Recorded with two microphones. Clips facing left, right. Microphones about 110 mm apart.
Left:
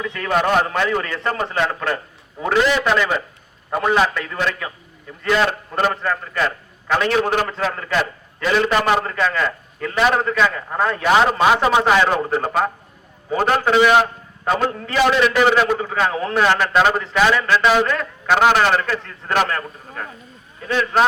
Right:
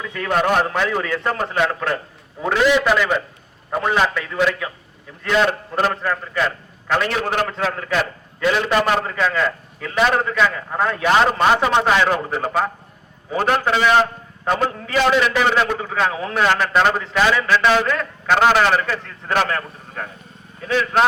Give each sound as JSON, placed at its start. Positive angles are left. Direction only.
{"t": 0.1, "sound": "a man's voice", "side_deg": -5}